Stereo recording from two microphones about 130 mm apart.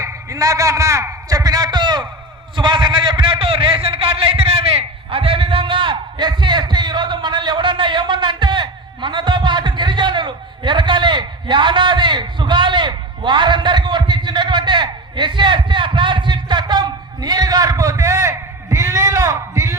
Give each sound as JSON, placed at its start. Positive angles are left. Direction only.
{"t": 0.0, "sound": "a man's voice", "side_deg": -25}